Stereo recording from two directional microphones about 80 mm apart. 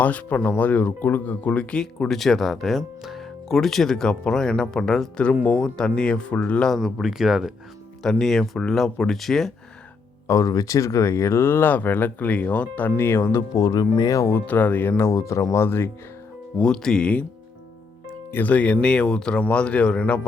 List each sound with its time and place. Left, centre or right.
0.0 s speech: centre
6.7 s speech: centre
10.2 s speech: left
16.6 s speech: centre
18.3 s speech: left